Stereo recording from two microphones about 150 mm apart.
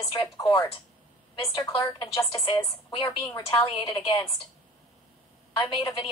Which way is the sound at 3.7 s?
35° left (ahead or behind).